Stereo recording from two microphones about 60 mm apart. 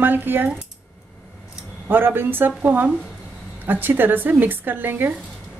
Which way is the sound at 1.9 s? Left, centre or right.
Right.